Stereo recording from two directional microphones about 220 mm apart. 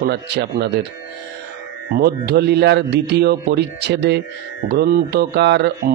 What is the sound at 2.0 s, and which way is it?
Speech, 45° right (ahead or behind).